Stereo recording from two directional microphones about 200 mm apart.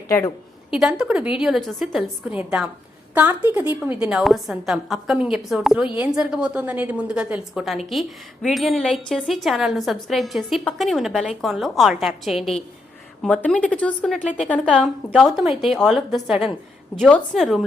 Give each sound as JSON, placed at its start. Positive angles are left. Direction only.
{"t": 0.1, "sound": "a woman's voice", "side_deg": 15}
{"t": 0.7, "sound": "a woman's voice", "side_deg": -5}